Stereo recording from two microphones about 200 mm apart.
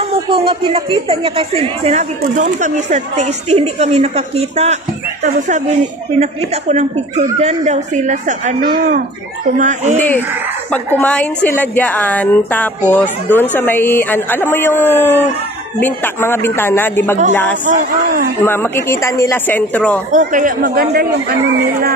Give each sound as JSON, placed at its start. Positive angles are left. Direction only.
{"t": 0.3, "sound": "a woman's voice", "side_deg": -25}
{"t": 6.7, "sound": "a woman's voice", "side_deg": -35}
{"t": 9.9, "sound": "a woman's voice", "side_deg": 10}
{"t": 17.6, "sound": "a woman's voice", "side_deg": -40}
{"t": 18.4, "sound": "a woman's voice", "side_deg": 10}
{"t": 20.1, "sound": "speech", "side_deg": -40}